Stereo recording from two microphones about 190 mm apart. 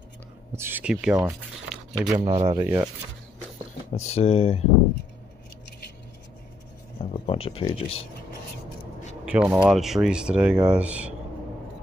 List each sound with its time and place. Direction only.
0.6 s speech: 10° right (ahead or behind)
2.0 s speech: 20° right (ahead or behind)
2.6 s speech: 15° right (ahead or behind)
3.9 s speech: 35° left (ahead or behind)
7.0 s speech: 30° left (ahead or behind)
9.2 s speech: 5° right (ahead or behind)